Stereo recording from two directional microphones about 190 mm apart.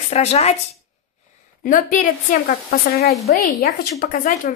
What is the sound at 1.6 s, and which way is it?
A woman's voice, 45° left (ahead or behind).